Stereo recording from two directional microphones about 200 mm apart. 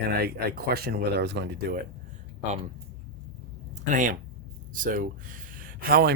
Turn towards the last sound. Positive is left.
turn(degrees=-50)  # may be behind; listen again after turning